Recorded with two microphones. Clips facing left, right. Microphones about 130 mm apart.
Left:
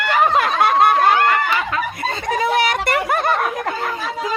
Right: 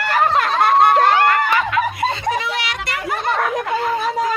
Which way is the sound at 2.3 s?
45° left (ahead or behind).